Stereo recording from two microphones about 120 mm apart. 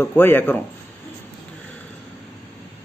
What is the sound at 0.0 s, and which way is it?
Speech, 15° left (ahead or behind).